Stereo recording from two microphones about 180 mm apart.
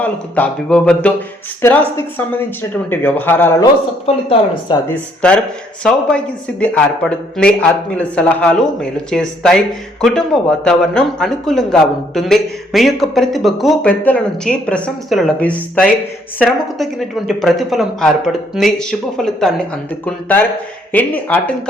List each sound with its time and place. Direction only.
0.0 s a woman's voice: 5° left (ahead or behind)
3.6 s speech: 25° left (ahead or behind)
4.9 s a woman's voice: 5° left (ahead or behind)